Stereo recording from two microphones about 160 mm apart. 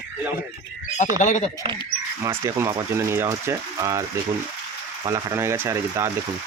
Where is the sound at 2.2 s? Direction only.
20° right (ahead or behind).